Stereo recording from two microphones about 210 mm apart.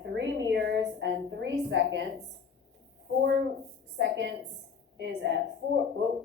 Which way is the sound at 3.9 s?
55° right (ahead or behind).